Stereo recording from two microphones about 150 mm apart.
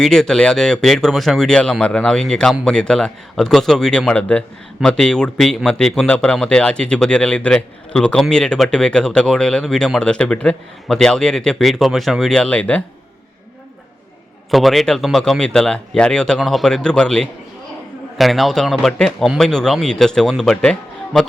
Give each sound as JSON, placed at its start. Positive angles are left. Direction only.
{"t": 0.0, "sound": "speech", "side_deg": 5}
{"t": 14.5, "sound": "speech", "side_deg": 0}